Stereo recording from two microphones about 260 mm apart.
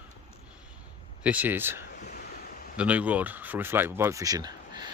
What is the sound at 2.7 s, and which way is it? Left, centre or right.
Speech, centre.